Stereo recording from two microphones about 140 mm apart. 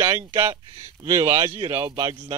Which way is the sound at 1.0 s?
25° right (ahead or behind).